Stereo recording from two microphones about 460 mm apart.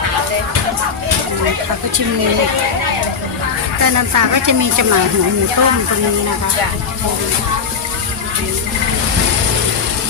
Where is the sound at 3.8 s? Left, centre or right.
Right.